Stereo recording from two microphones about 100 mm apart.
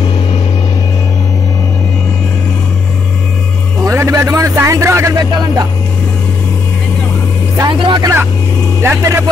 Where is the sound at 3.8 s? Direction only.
30° right (ahead or behind).